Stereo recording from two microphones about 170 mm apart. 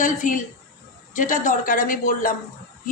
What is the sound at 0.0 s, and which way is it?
Speech, 50° left (ahead or behind).